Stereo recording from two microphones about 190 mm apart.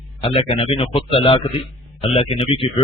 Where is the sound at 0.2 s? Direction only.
30° left (ahead or behind).